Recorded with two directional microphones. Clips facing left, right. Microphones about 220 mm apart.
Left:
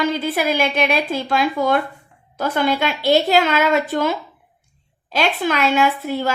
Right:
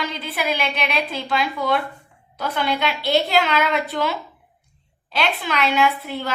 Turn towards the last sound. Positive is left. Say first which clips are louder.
# left 3 dB
turn(degrees=45)  # may be behind; listen again after turning